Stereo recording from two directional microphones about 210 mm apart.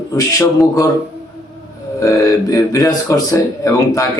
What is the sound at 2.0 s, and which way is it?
Speech, 15° left (ahead or behind).